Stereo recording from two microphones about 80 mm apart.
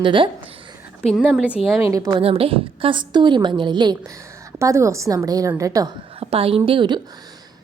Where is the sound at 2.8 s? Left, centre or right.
Right.